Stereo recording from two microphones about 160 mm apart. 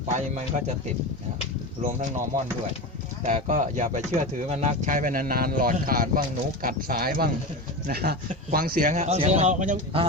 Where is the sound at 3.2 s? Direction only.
50° right (ahead or behind).